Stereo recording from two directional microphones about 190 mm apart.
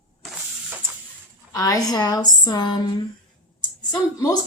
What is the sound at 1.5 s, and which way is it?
Speech, 15° left (ahead or behind).